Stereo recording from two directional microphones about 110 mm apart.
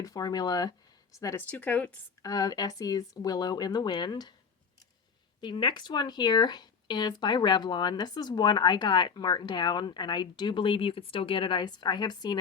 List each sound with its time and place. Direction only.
0.0 s speech: 35° left (ahead or behind)
1.4 s a woman's voice: 15° left (ahead or behind)
2.2 s speech: 35° left (ahead or behind)
5.4 s speech: 45° left (ahead or behind)